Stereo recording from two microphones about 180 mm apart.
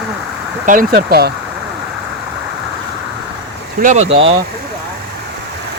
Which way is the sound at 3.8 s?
45° right (ahead or behind).